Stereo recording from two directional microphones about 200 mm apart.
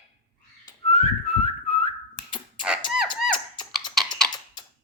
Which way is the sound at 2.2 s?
25° left (ahead or behind).